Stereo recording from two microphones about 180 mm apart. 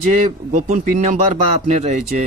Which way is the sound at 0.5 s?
40° right (ahead or behind).